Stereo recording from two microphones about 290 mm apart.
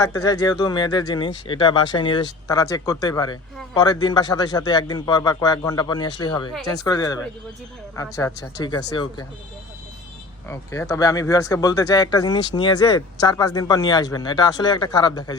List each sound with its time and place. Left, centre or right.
0.0 s speech: centre
10.5 s speech: centre